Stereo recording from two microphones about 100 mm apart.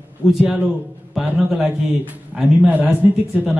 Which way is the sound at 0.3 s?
5° right (ahead or behind).